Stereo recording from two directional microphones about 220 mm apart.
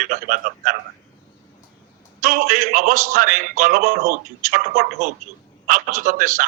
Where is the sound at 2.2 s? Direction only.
35° right (ahead or behind).